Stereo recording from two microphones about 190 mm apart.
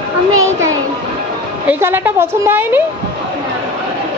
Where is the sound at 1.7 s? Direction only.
10° right (ahead or behind).